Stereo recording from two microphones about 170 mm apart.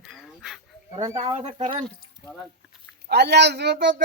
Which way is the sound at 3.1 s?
75° right (ahead or behind).